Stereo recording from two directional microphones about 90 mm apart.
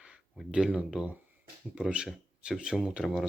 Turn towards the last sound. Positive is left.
turn(degrees=-5)  # may be behind; listen again after turning